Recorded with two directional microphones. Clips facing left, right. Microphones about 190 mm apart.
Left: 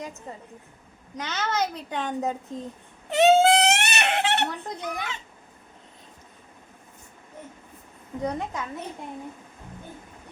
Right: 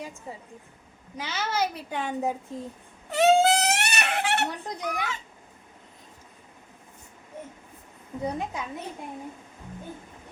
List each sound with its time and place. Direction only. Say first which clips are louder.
0.0 s a child's voice: left 1 dB; 10° right (ahead or behind)
3.1 s crying: left 2 dB; 25° left (ahead or behind)
8.2 s a child's voice: left 1 dB; 15° right (ahead or behind)